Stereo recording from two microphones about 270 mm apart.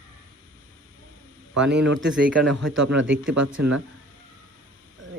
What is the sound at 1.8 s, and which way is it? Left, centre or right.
Speech, right.